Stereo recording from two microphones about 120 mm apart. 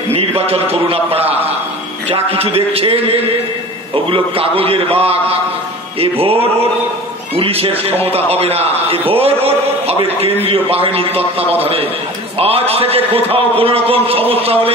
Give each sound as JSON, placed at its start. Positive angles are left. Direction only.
{"t": 0.1, "sound": "a man's voice", "side_deg": -55}
{"t": 7.3, "sound": "a man's voice", "side_deg": -55}